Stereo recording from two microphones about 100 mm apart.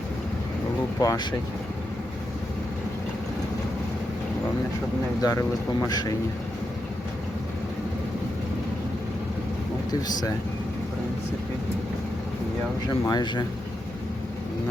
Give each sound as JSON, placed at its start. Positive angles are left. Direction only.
{"t": 0.9, "sound": "speech", "side_deg": 40}
{"t": 5.2, "sound": "speech", "side_deg": 35}
{"t": 13.1, "sound": "speech", "side_deg": 50}